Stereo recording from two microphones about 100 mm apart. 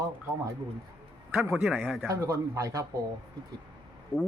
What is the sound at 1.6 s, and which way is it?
Speech, 15° right (ahead or behind).